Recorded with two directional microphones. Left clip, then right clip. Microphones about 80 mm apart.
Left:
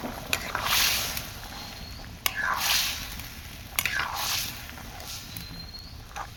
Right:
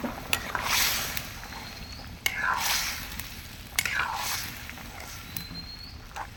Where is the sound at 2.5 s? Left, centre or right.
Left.